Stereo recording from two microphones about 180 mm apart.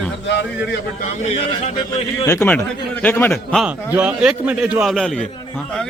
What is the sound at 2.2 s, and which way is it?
A man's voice, 15° left (ahead or behind).